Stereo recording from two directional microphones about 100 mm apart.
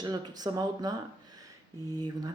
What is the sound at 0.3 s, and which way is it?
Speech, 40° right (ahead or behind).